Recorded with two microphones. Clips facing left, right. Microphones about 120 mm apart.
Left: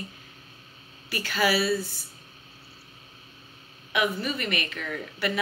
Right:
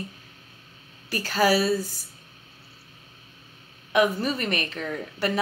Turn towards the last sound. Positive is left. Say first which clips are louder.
# right 3 dB
turn(degrees=-35)  # may be behind; listen again after turning